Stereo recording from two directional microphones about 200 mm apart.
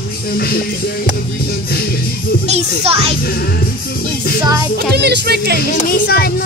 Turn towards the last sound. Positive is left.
turn(degrees=50)  # may be behind; listen again after turning